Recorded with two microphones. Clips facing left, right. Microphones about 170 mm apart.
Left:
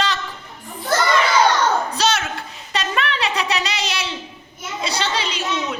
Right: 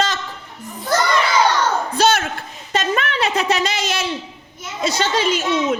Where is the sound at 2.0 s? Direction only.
55° right (ahead or behind).